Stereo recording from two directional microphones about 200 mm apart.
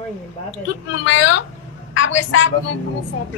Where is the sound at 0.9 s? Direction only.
70° left (ahead or behind).